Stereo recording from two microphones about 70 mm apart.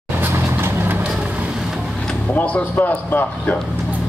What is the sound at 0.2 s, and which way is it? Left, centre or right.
Vehicle, right.